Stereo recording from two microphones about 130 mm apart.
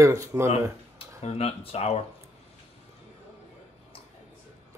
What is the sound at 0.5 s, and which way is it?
Speech, 50° left (ahead or behind).